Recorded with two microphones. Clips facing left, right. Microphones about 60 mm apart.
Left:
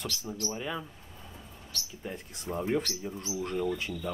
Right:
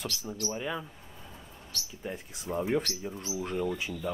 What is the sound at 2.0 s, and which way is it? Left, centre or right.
Speech, centre.